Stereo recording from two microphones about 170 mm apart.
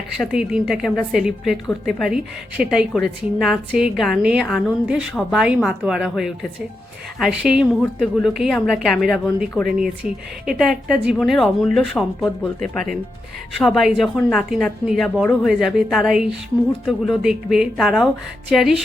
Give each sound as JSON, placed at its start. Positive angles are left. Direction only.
{"t": 0.2, "sound": "speech", "side_deg": -5}
{"t": 13.6, "sound": "speech", "side_deg": 0}